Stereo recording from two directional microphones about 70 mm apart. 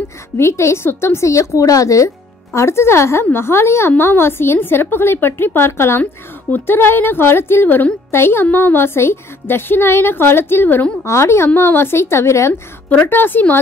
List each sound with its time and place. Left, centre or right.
0.4 s a woman's voice: left
11.1 s a woman's voice: left
12.9 s a woman's voice: left